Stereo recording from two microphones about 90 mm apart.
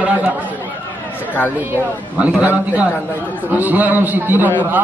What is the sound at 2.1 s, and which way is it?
A man's voice, 15° right (ahead or behind).